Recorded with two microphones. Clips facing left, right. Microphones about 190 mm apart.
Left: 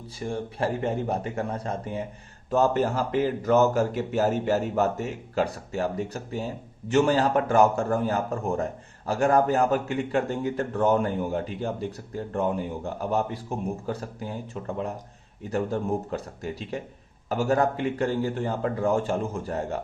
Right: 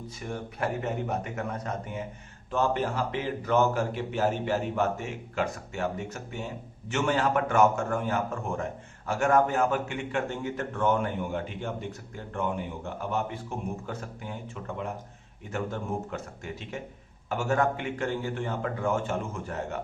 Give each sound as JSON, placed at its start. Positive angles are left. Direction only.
{"t": 0.2, "sound": "a man's voice", "side_deg": 30}